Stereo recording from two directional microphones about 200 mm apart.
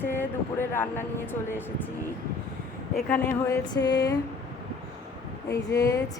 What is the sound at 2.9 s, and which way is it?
Speech, 10° left (ahead or behind).